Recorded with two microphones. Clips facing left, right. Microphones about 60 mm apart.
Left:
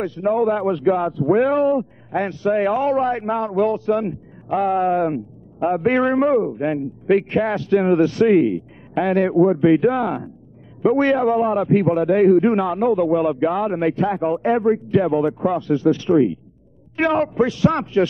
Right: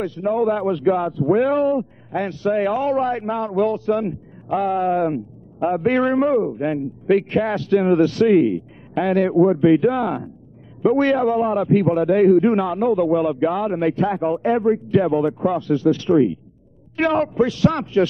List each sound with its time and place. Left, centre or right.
0.2 s a man's voice: centre
16.0 s a man's voice: centre